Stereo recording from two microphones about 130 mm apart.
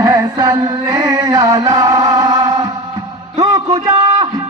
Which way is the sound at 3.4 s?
30° right (ahead or behind).